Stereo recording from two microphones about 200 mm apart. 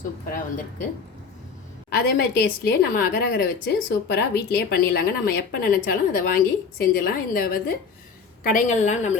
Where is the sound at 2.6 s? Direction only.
50° left (ahead or behind).